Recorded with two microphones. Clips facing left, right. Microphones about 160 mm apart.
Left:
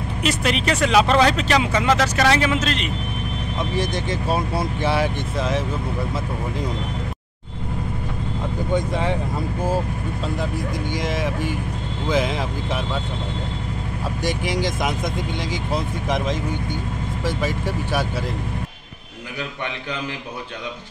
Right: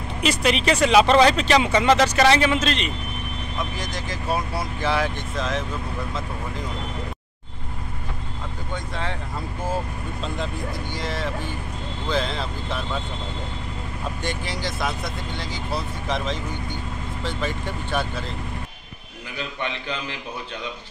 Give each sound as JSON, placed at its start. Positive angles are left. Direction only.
{"t": 0.2, "sound": "speech", "side_deg": 0}
{"t": 3.7, "sound": "speech", "side_deg": 25}
{"t": 8.7, "sound": "speech", "side_deg": 15}
{"t": 10.2, "sound": "speech", "side_deg": 10}
{"t": 14.2, "sound": "speech", "side_deg": 15}